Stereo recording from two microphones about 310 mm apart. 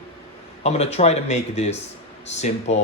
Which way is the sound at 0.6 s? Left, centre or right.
Left.